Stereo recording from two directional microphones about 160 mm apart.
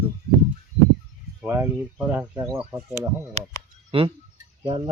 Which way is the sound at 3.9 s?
35° right (ahead or behind).